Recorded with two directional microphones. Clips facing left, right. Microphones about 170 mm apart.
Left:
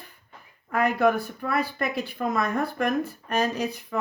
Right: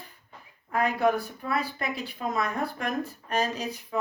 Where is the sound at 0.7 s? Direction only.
60° left (ahead or behind).